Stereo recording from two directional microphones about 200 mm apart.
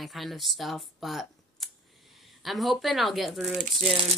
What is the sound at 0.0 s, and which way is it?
Speech, centre (ahead or behind).